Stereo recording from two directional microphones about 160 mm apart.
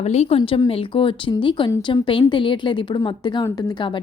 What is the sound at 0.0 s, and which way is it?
A woman's voice, 45° left (ahead or behind).